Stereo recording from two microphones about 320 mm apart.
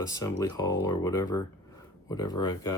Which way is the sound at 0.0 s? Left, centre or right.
Centre.